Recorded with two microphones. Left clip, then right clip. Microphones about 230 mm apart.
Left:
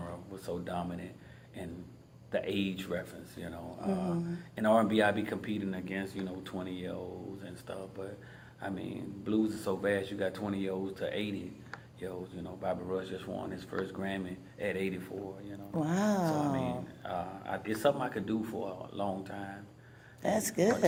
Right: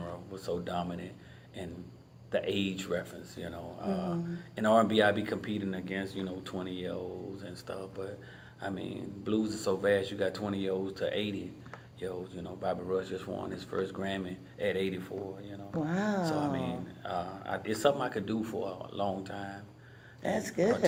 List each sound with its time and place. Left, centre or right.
0.0 s speech: centre
2.3 s speech: centre
15.8 s speech: left
17.0 s speech: centre
20.5 s speech: left